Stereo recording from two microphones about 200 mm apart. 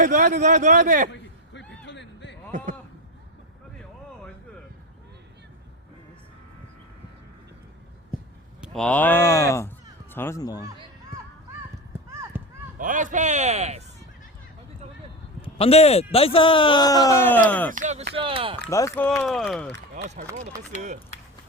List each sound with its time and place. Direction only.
0.0 s speech: 40° right (ahead or behind)
1.1 s a sound: 60° left (ahead or behind)
8.6 s speech: 5° left (ahead or behind)
12.3 s run: 10° right (ahead or behind)
12.8 s speech: 40° right (ahead or behind)
15.4 s speech: 30° left (ahead or behind); by 17.7 s 10° left (ahead or behind)
17.7 s speech: 40° right (ahead or behind)
18.1 s speech: 25° right (ahead or behind)
18.7 s speech: 15° left (ahead or behind)
20.0 s speech: 35° right (ahead or behind)